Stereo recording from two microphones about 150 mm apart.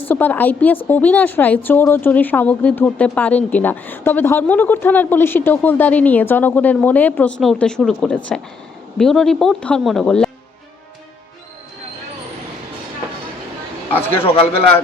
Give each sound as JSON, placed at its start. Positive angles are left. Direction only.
{"t": 0.1, "sound": "speech", "side_deg": 10}
{"t": 14.2, "sound": "a man's voice", "side_deg": 35}